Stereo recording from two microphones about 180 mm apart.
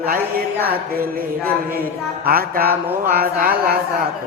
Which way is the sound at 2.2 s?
55° right (ahead or behind).